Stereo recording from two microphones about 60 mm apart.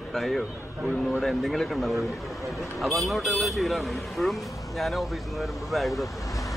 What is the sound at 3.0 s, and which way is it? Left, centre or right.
Speech, centre.